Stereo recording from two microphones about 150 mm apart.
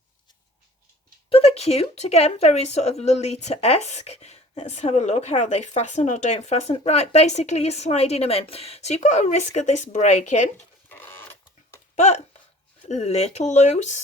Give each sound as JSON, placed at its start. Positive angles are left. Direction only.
{"t": 1.3, "sound": "speech", "side_deg": 40}
{"t": 10.8, "sound": "printer", "side_deg": 15}
{"t": 11.9, "sound": "a sound", "side_deg": 50}
{"t": 12.9, "sound": "speech", "side_deg": 45}